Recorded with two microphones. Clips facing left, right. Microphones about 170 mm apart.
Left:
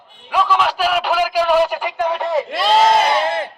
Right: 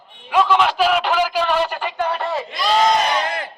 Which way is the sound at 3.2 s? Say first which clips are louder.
Left 5 dB; 25° left (ahead or behind).